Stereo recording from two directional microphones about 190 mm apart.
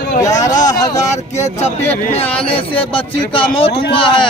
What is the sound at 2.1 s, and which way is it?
A man's voice, 30° left (ahead or behind).